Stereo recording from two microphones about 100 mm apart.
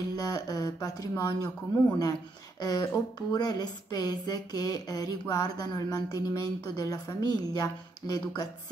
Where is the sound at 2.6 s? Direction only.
40° left (ahead or behind).